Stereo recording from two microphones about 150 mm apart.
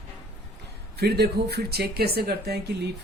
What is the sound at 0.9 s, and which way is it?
Speech, 90° right.